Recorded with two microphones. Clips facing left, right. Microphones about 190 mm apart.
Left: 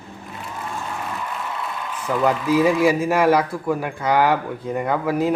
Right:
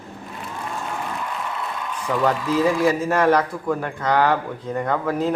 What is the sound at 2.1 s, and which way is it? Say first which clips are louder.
A man's voice: left 2 dB; 10° left (ahead or behind).